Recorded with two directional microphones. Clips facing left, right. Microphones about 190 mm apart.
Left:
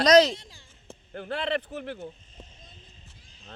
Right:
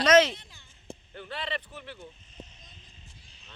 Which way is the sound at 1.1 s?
50° left (ahead or behind).